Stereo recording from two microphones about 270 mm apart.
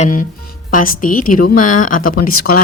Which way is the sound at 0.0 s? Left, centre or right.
Left.